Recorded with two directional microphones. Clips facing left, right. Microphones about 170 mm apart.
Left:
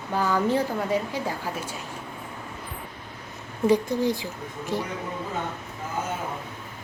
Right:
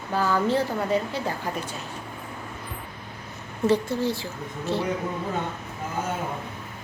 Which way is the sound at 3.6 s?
15° left (ahead or behind).